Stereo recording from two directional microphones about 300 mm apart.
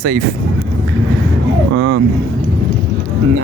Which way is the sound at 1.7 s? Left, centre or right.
Right.